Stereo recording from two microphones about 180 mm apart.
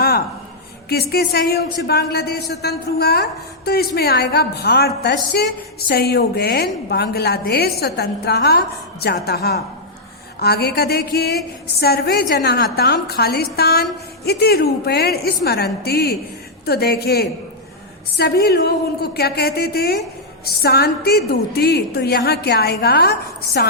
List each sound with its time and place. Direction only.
0.9 s speech: 60° left (ahead or behind)